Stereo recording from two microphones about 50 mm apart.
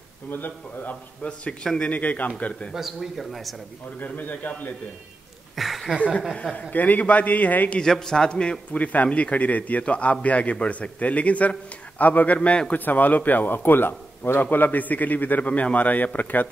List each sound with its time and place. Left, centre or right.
0.3 s a man's voice: left
1.2 s a man's voice: left
2.7 s speech: centre
4.0 s a man's voice: left
5.6 s a sound: centre
6.7 s a man's voice: left
7.8 s a man's voice: centre
12.7 s a man's voice: left